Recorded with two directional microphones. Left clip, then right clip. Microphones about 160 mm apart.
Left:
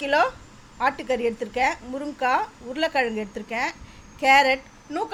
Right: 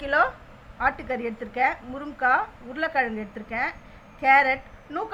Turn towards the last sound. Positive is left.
turn(degrees=20)  # may be behind; listen again after turning